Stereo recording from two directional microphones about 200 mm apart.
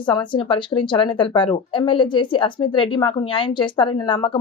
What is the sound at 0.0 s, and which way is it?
Speech, 25° left (ahead or behind).